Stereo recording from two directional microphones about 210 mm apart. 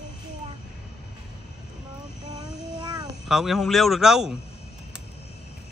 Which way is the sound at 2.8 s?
20° right (ahead or behind).